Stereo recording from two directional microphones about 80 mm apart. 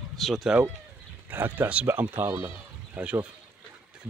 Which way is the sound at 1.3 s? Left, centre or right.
Right.